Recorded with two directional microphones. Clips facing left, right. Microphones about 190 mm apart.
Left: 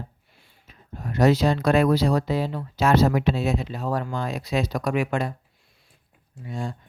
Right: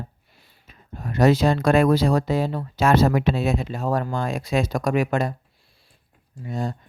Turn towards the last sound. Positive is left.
turn(degrees=-40)  # may be behind; listen again after turning